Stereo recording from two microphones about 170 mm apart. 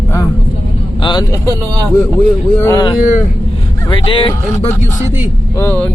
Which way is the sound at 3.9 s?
30° left (ahead or behind).